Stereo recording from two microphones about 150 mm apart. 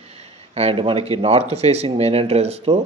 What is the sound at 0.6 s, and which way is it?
A man's voice, 40° right (ahead or behind).